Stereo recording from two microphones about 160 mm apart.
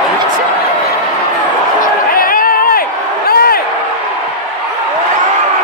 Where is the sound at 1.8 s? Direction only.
60° left (ahead or behind).